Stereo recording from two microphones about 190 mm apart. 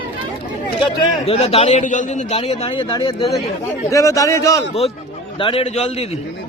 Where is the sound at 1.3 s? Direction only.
30° left (ahead or behind); by 4.6 s 15° left (ahead or behind).